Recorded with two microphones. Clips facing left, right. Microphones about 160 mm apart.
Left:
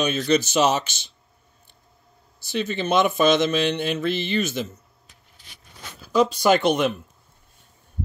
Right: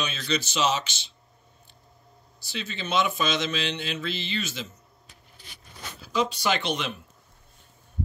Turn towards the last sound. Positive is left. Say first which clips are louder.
# left 9 dB
turn(degrees=50)  # may be behind; listen again after turning